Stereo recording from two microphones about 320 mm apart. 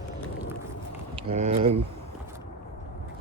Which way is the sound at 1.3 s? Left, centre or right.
Centre.